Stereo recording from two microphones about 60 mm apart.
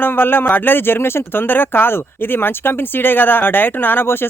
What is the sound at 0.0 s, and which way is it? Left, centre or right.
Speech, left.